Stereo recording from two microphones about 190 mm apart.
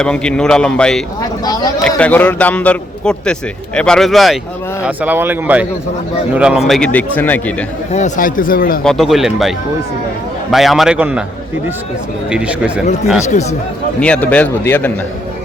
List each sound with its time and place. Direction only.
0.0 s a man's voice: 5° left (ahead or behind)
7.9 s speech: 40° left (ahead or behind)
8.8 s speech: centre (ahead or behind)
10.5 s speech: centre (ahead or behind)
12.3 s speech: 5° right (ahead or behind)
14.0 s a man's voice: 5° left (ahead or behind)